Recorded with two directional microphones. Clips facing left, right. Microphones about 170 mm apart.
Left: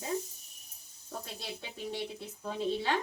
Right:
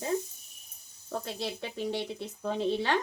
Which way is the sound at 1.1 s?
75° right (ahead or behind).